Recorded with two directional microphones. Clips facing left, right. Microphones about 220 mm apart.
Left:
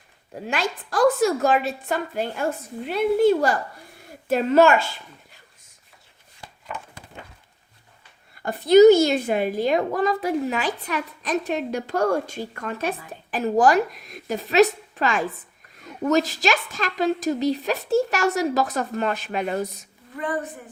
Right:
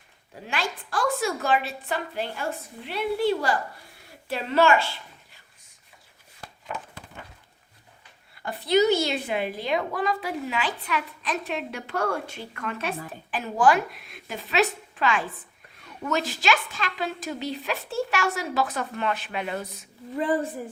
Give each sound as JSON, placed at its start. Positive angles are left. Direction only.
{"t": 0.4, "sound": "a woman's voice", "side_deg": 45}
{"t": 8.4, "sound": "a woman's voice", "side_deg": 45}